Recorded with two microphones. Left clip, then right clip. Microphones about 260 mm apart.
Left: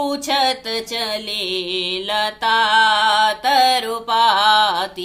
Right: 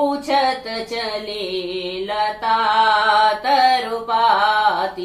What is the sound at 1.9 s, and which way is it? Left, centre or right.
Mantra, left.